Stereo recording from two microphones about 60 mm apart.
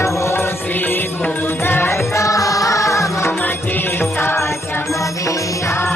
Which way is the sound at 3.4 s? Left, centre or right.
Left.